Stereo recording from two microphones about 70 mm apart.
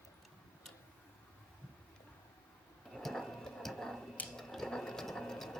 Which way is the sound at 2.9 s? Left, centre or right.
Centre.